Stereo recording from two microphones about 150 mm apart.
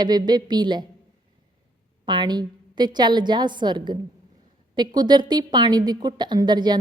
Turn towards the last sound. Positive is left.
turn(degrees=-30)  # may be behind; listen again after turning